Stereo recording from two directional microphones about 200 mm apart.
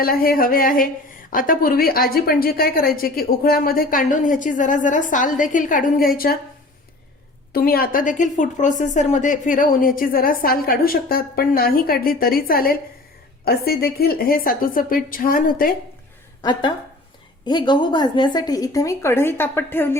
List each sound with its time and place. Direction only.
0.0 s a woman's voice: 45° left (ahead or behind)
7.5 s a woman's voice: 50° left (ahead or behind)
16.4 s a woman's voice: 25° left (ahead or behind)